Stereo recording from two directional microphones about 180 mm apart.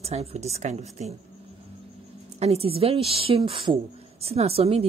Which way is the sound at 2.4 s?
35° right (ahead or behind).